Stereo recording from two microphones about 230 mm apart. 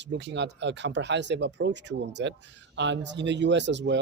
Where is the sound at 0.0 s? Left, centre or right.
Right.